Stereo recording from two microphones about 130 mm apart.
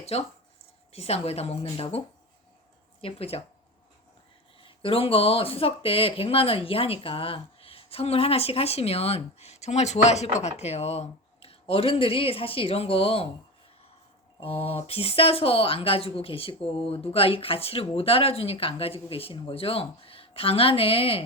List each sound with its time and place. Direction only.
0.0 s speech: 50° left (ahead or behind)
3.0 s speech: 50° left (ahead or behind)
4.6 s speech: 45° left (ahead or behind)
14.4 s speech: 50° left (ahead or behind)